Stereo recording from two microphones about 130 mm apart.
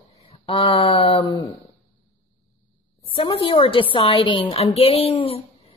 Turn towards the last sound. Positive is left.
turn(degrees=50)  # may be behind; listen again after turning